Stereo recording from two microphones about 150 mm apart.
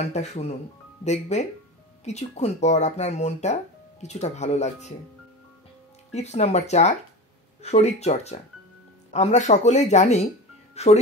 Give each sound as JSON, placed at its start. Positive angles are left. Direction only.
{"t": 0.0, "sound": "speech", "side_deg": 45}
{"t": 6.1, "sound": "speech", "side_deg": 45}
{"t": 10.7, "sound": "music", "side_deg": 45}